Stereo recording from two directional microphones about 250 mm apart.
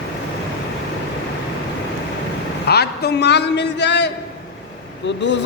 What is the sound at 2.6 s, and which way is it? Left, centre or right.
A man's voice, left.